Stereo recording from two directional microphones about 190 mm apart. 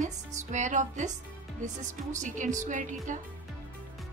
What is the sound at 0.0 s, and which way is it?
Speech, 40° right (ahead or behind).